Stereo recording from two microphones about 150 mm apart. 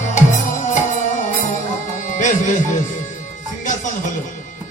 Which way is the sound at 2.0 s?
60° left (ahead or behind).